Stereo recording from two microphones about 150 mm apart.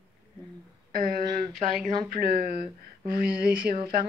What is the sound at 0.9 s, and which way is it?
Speech, 70° right (ahead or behind).